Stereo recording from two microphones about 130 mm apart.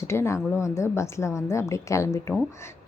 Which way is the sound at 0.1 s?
20° left (ahead or behind).